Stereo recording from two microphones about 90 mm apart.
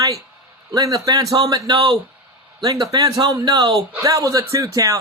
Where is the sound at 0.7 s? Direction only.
40° right (ahead or behind).